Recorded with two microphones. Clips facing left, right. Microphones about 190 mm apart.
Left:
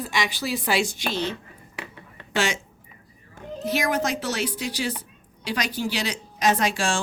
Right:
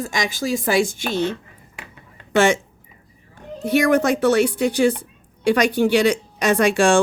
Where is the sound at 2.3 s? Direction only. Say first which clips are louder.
Right 9 dB; 55° right (ahead or behind).